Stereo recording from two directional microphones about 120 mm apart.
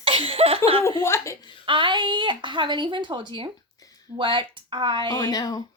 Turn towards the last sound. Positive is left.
turn(degrees=30)  # may be behind; listen again after turning